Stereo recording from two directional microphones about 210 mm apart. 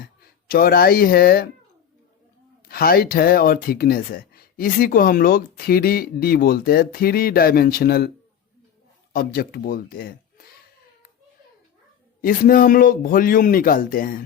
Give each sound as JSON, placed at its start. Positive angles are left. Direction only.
{"t": 0.4, "sound": "speech", "side_deg": 45}
{"t": 2.6, "sound": "speech", "side_deg": 45}
{"t": 9.1, "sound": "speech", "side_deg": 45}
{"t": 12.2, "sound": "speech", "side_deg": 45}